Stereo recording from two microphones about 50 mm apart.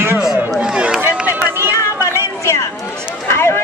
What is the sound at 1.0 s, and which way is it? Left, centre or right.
Run, right.